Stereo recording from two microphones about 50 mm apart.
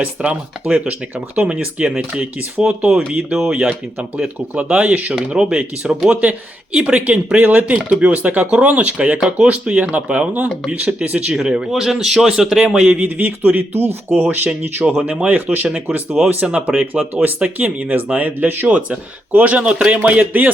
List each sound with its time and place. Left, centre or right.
0.0 s speech: right
1.4 s speech: right
3.3 s a man's voice: centre
11.8 s a man's voice: centre
13.1 s speech: right
15.5 s a man's voice: centre
15.9 s speech: right
16.5 s speech: right
16.7 s speech: right
19.5 s a man's voice: centre
20.1 s speech: right